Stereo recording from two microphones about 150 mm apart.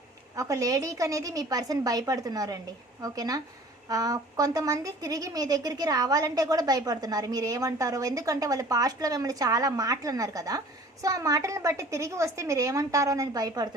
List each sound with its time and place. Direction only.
0.3 s a woman's voice: 20° right (ahead or behind)